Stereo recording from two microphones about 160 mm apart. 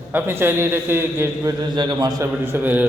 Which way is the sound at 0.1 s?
15° right (ahead or behind).